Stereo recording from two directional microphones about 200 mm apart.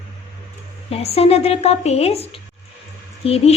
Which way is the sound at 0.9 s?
30° left (ahead or behind).